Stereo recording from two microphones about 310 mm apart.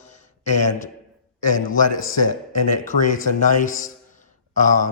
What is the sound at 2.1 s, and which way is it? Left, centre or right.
Speech, left.